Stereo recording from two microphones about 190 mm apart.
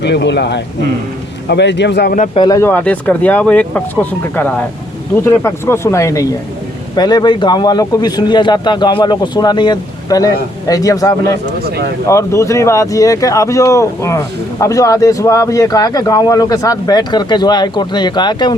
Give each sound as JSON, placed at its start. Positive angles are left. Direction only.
{"t": 0.0, "sound": "speech", "side_deg": 65}
{"t": 2.1, "sound": "speech", "side_deg": 35}
{"t": 2.4, "sound": "a man's voice", "side_deg": 15}